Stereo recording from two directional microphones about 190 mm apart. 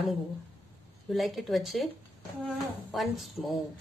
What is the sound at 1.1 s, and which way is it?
A woman's voice, centre (ahead or behind).